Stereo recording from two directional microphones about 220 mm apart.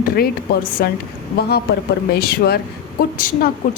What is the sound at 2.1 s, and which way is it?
Speech, 45° left (ahead or behind).